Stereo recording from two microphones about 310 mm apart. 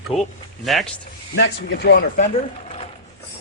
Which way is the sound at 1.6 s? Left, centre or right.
Left.